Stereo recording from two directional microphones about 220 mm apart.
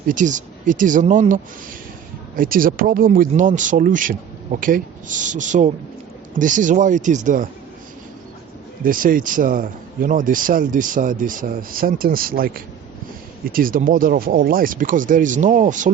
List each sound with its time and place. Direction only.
0.1 s a man's voice: 35° right (ahead or behind)
8.8 s a man's voice: 40° right (ahead or behind)